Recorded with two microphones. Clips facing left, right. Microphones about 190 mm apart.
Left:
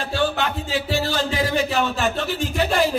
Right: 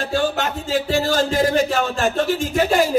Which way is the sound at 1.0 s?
45° right (ahead or behind).